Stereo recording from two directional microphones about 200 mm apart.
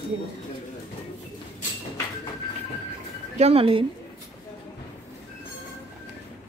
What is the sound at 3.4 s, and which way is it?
Speech, 30° right (ahead or behind).